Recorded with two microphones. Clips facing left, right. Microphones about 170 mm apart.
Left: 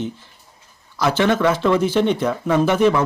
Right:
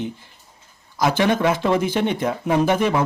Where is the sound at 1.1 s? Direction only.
15° right (ahead or behind).